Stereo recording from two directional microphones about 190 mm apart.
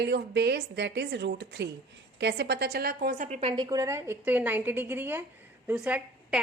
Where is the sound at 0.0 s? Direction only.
65° right (ahead or behind).